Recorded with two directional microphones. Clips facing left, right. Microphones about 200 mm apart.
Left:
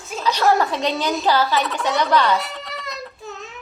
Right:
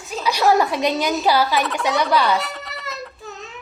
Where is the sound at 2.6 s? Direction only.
Centre (ahead or behind).